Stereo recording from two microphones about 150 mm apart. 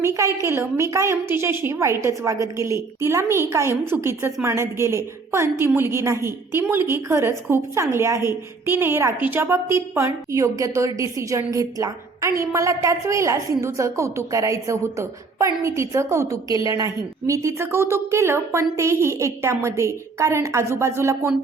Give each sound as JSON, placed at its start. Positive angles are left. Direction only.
{"t": 0.0, "sound": "a woman's voice", "side_deg": -20}